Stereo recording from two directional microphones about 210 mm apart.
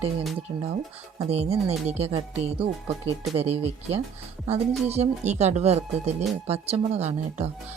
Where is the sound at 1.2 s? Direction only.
30° right (ahead or behind).